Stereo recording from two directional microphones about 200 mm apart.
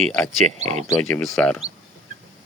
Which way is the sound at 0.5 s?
35° right (ahead or behind).